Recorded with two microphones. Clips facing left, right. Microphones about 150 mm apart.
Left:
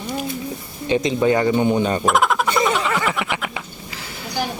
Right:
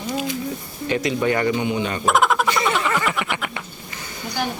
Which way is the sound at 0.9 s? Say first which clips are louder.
Left 3 dB; 20° left (ahead or behind).